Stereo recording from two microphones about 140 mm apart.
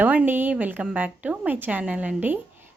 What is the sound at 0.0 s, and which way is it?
Speech, 10° right (ahead or behind).